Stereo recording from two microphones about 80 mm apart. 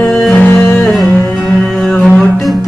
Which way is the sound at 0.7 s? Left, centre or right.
Centre.